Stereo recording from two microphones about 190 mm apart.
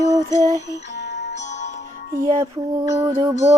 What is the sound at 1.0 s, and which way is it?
Music, 65° left (ahead or behind).